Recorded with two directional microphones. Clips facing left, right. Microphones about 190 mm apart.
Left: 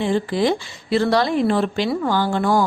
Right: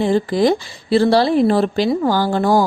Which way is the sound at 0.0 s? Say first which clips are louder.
Right 4 dB; 40° right (ahead or behind).